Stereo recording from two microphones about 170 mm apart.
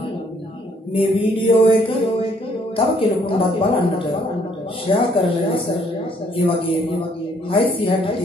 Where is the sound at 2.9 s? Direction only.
30° left (ahead or behind).